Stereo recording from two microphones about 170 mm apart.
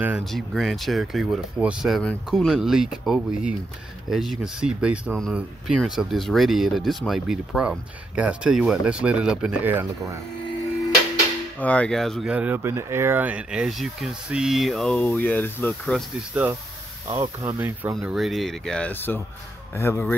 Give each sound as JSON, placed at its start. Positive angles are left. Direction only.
{"t": 0.0, "sound": "speech", "side_deg": -5}
{"t": 11.6, "sound": "speech", "side_deg": 5}
{"t": 17.1, "sound": "speech", "side_deg": -20}
{"t": 17.9, "sound": "speech", "side_deg": 0}